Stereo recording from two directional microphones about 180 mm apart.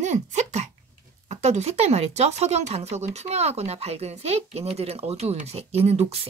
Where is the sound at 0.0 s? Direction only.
40° right (ahead or behind).